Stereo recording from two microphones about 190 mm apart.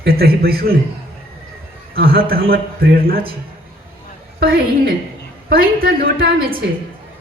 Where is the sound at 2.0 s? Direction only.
55° right (ahead or behind).